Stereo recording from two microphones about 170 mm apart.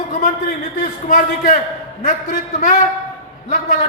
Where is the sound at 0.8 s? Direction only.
50° left (ahead or behind).